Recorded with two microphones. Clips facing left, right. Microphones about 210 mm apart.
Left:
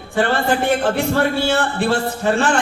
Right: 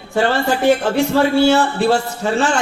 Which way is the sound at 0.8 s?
55° left (ahead or behind).